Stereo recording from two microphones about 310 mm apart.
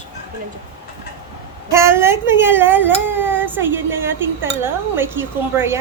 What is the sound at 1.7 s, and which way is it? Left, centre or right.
Speech, centre.